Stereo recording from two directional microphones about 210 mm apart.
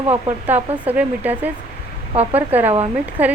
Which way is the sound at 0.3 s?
10° right (ahead or behind).